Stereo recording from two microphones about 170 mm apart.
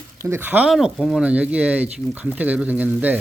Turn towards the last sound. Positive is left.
turn(degrees=-10)  # may be behind; listen again after turning